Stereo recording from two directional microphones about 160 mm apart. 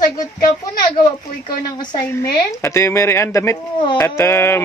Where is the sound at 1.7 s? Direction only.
25° left (ahead or behind).